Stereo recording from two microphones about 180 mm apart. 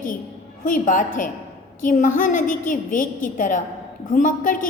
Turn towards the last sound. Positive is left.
turn(degrees=45)  # may be behind; listen again after turning